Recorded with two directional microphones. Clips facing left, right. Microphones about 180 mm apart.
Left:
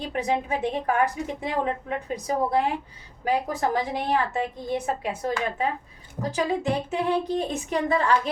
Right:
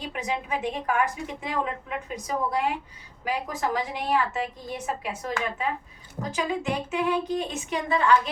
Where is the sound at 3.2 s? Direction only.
35° left (ahead or behind).